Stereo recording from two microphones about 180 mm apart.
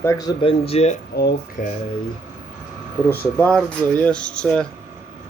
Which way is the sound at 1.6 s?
40° left (ahead or behind).